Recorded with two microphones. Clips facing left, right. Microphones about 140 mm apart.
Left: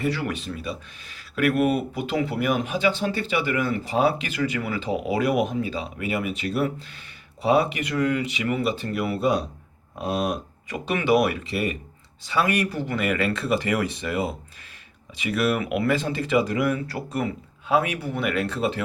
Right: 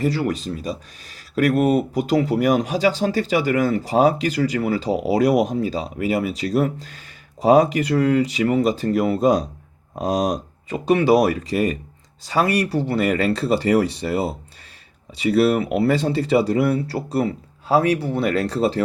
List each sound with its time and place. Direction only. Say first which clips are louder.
0.0 s speech: right 5 dB; 35° right (ahead or behind)